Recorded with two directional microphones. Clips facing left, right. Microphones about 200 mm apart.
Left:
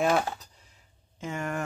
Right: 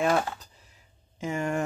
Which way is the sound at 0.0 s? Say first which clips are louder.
Even; centre (ahead or behind).